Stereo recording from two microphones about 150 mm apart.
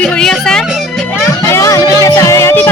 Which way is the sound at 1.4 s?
20° left (ahead or behind).